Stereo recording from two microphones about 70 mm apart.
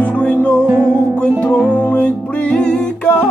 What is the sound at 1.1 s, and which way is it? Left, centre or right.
Music, left.